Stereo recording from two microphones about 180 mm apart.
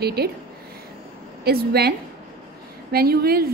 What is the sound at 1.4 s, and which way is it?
A woman's voice, 60° right (ahead or behind).